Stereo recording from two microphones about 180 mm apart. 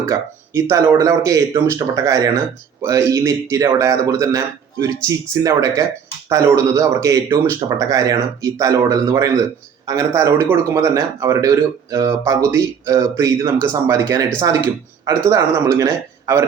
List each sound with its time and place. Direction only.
0.0 s speech: 15° right (ahead or behind)